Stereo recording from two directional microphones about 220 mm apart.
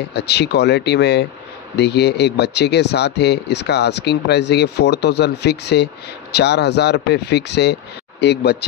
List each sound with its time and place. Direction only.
0.1 s speech: 50° left (ahead or behind)